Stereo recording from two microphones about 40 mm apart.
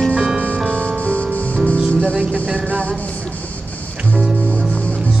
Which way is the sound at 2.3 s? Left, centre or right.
Right.